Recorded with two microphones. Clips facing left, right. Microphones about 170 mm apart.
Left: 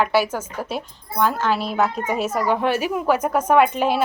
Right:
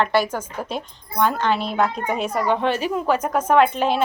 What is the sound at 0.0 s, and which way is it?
A woman's voice, 5° left (ahead or behind).